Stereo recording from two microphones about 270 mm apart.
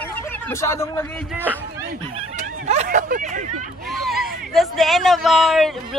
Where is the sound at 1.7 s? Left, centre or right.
Centre.